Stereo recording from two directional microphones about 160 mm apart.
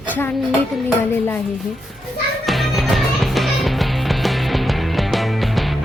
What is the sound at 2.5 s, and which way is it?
Music, centre (ahead or behind).